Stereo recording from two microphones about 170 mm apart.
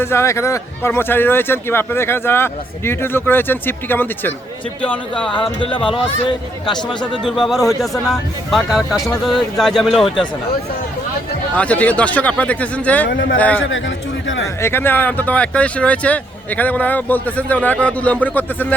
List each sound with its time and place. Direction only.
0.0 s a man's voice: 15° left (ahead or behind)
5.5 s speech: 30° left (ahead or behind)
7.4 s speech: centre (ahead or behind)
11.5 s a man's voice: 10° left (ahead or behind)
13.1 s speech: 90° left
14.4 s a man's voice: 15° left (ahead or behind)